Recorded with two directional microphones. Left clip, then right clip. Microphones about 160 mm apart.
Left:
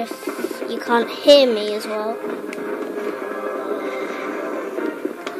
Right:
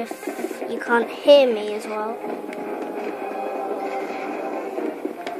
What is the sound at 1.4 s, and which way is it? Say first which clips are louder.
Speech: left 2 dB; 15° right (ahead or behind).